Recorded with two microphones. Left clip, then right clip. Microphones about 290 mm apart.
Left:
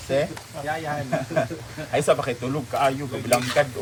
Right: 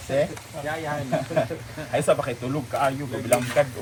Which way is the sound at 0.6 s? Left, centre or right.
Centre.